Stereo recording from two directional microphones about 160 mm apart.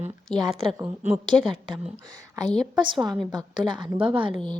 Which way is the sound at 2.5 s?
Centre (ahead or behind).